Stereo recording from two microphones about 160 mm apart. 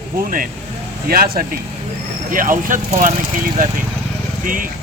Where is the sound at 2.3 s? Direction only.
60° right (ahead or behind).